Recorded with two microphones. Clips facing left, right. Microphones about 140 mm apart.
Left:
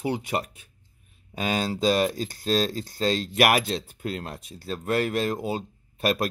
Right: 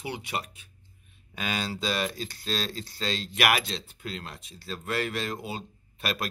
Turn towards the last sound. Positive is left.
turn(degrees=45)  # may be behind; listen again after turning